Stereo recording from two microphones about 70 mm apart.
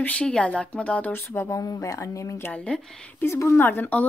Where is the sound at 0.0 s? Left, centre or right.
Centre.